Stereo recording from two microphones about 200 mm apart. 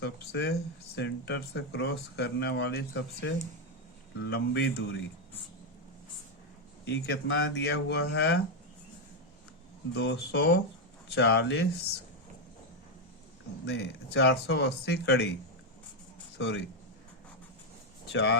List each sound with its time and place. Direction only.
0.0 s speech: 55° left (ahead or behind)
6.8 s speech: 55° left (ahead or behind)
9.9 s speech: 60° left (ahead or behind)
13.7 s speech: 60° left (ahead or behind)
16.4 s speech: 60° left (ahead or behind)
18.1 s speech: 60° left (ahead or behind)